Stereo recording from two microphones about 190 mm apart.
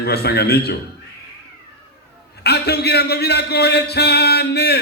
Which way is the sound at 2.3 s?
60° left (ahead or behind).